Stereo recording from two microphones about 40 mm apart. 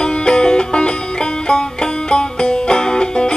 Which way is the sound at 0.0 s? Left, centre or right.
Left.